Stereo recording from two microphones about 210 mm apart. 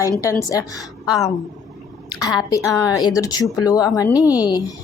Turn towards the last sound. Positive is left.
turn(degrees=20)  # may be behind; listen again after turning